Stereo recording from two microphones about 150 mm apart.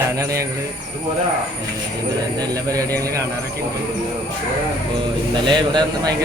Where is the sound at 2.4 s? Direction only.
25° right (ahead or behind).